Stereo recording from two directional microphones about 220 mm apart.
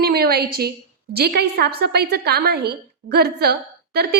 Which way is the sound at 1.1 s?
45° right (ahead or behind).